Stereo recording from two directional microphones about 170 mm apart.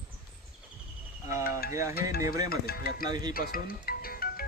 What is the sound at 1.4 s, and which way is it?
Speech, 60° left (ahead or behind).